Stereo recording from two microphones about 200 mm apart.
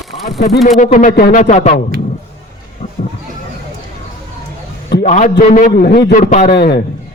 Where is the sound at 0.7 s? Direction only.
40° left (ahead or behind).